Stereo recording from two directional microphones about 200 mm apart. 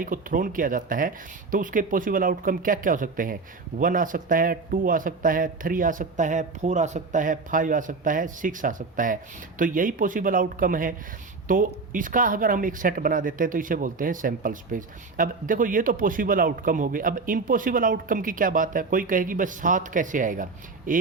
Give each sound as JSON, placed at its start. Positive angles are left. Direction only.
{"t": 0.0, "sound": "a man's voice", "side_deg": -45}